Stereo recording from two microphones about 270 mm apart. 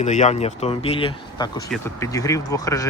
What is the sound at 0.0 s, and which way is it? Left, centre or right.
Speech, left.